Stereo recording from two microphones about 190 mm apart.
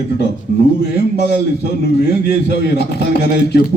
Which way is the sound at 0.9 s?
60° left (ahead or behind).